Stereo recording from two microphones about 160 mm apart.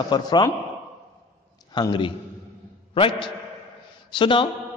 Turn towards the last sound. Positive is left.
turn(degrees=30)  # may be behind; listen again after turning